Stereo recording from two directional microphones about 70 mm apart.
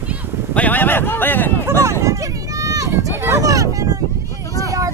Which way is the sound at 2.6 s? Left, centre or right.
Right.